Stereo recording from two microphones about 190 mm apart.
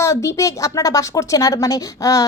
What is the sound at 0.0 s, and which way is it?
A woman's voice, 15° left (ahead or behind).